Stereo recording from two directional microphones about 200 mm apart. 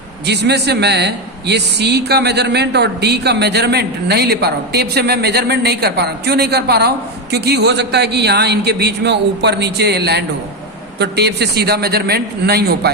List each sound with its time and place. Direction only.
0.3 s a man's voice: 55° right (ahead or behind)